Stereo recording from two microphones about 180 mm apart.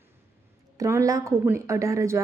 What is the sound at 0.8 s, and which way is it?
A woman's voice, 15° right (ahead or behind).